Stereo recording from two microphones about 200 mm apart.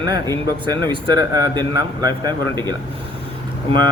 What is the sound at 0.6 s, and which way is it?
Speech, 20° right (ahead or behind).